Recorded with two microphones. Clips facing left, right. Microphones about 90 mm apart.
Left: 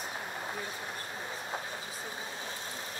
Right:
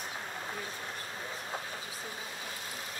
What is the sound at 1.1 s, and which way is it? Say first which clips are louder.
Train: left 1 dB; 20° left (ahead or behind).